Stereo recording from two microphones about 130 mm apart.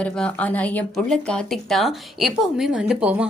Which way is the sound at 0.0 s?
10° left (ahead or behind).